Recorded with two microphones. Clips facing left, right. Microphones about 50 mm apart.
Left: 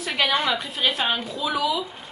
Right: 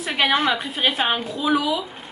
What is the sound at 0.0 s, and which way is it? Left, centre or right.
A woman's voice, centre.